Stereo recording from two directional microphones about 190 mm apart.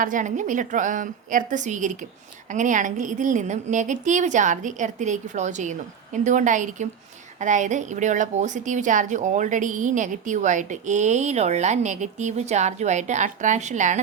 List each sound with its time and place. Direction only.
0.0 s a woman's voice: 40° right (ahead or behind)